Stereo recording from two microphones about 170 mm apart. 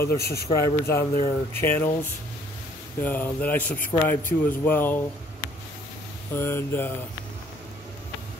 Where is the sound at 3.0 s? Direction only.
10° left (ahead or behind).